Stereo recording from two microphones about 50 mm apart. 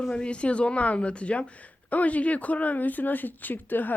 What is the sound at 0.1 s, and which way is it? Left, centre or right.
Speech, left.